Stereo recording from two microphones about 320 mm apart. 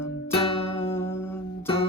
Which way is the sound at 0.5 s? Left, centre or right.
Centre.